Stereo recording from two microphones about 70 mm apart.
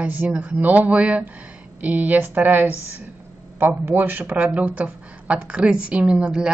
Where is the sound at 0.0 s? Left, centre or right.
Right.